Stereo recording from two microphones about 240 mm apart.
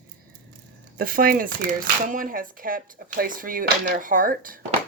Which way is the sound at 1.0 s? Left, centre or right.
Right.